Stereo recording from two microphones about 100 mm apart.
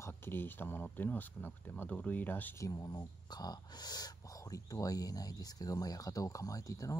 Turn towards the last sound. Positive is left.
turn(degrees=35)  # may be behind; listen again after turning